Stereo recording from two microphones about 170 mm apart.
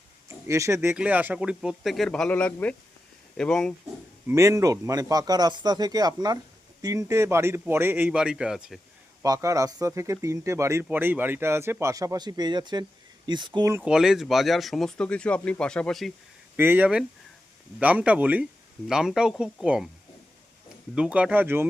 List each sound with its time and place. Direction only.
0.3 s speech: 20° right (ahead or behind); by 3.8 s 5° left (ahead or behind)
4.3 s speech: 20° right (ahead or behind)
9.2 s speech: 20° right (ahead or behind)
13.8 s speech: 5° right (ahead or behind)
16.6 s speech: 10° right (ahead or behind)
20.9 s speech: 5° right (ahead or behind)